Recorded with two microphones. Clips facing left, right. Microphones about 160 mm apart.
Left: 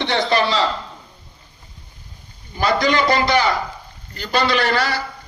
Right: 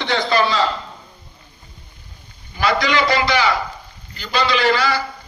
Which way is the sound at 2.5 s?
45° left (ahead or behind).